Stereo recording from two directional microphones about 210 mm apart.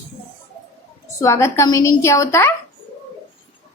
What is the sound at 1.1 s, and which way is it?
A woman's voice, 15° left (ahead or behind).